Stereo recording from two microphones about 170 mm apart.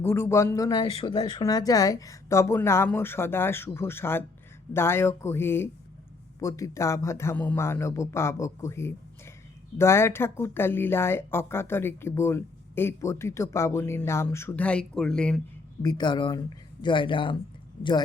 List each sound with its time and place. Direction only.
0.0 s a woman's voice: 15° left (ahead or behind)
15.8 s speech: 25° left (ahead or behind)